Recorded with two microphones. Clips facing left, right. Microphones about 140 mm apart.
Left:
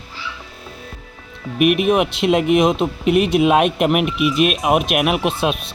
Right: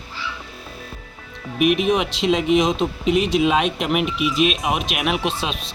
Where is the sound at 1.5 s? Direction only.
60° left (ahead or behind).